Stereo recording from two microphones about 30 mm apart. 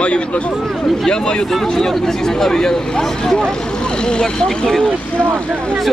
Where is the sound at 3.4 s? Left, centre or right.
Left.